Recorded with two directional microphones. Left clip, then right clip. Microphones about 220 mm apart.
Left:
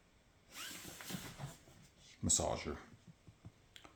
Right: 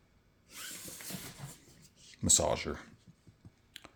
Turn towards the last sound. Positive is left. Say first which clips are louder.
# right 6 dB
turn(degrees=-35)  # may be behind; listen again after turning